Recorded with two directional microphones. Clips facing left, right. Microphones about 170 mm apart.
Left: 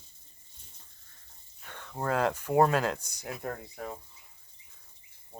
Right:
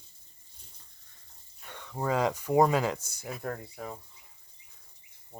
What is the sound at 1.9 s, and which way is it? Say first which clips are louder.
Speech: right 1 dB; 5° right (ahead or behind).